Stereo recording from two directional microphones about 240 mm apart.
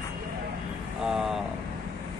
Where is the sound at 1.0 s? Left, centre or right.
Centre.